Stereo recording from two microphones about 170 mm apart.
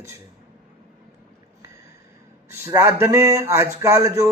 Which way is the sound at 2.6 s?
15° right (ahead or behind).